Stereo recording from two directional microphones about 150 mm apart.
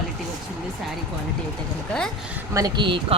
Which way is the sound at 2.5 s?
30° right (ahead or behind).